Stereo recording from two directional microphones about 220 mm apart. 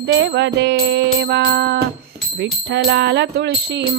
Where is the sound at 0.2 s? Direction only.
50° right (ahead or behind).